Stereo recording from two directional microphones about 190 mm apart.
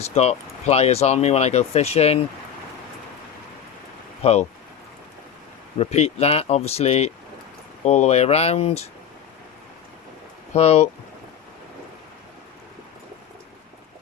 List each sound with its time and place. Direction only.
0.0 s speech: 35° left (ahead or behind)
4.2 s speech: 35° left (ahead or behind)
5.7 s speech: 35° left (ahead or behind)
10.5 s speech: 35° left (ahead or behind)